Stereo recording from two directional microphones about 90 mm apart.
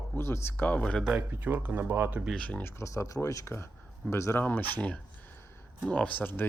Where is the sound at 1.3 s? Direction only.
20° right (ahead or behind).